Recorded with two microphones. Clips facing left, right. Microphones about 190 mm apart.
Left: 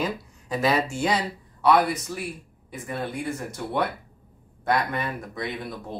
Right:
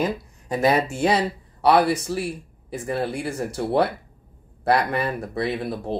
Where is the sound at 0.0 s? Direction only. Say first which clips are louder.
Right 4 dB; 50° right (ahead or behind).